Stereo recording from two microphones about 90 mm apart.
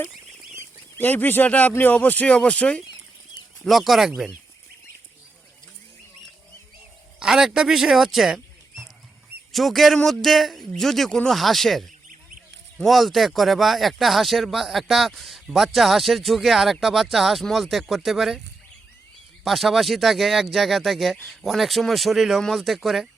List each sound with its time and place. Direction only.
0.9 s speech: 20° left (ahead or behind)
3.7 s speech: centre (ahead or behind)
7.2 s speech: 5° right (ahead or behind)
9.5 s speech: centre (ahead or behind)
19.5 s speech: centre (ahead or behind)